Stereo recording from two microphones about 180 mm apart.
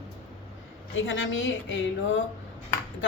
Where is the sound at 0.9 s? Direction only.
90° left.